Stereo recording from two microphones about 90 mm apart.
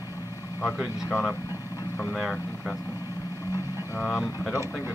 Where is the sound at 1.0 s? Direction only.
30° left (ahead or behind).